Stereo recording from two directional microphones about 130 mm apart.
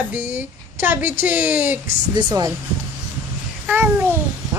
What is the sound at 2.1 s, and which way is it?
Speech, 30° right (ahead or behind).